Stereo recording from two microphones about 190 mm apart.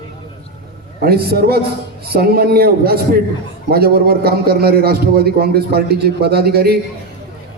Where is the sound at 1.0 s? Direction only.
55° right (ahead or behind).